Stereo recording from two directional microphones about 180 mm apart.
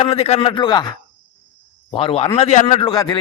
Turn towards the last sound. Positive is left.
turn(degrees=25)  # may be behind; listen again after turning